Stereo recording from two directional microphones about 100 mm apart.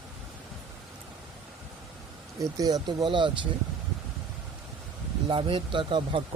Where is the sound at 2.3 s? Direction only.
40° right (ahead or behind).